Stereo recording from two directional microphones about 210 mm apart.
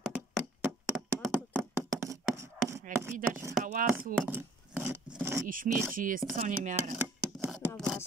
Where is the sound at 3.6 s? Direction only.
40° right (ahead or behind).